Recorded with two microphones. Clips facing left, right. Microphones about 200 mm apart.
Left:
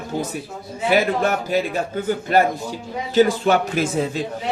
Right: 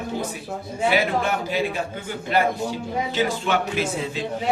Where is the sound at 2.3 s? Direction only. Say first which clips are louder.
Left 1 dB; 45° left (ahead or behind).